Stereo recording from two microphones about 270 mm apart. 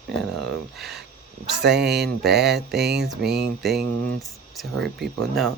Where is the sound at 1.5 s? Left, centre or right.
Right.